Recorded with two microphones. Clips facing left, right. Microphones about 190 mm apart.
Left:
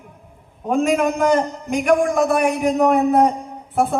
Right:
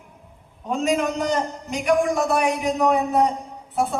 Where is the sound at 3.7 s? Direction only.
50° left (ahead or behind).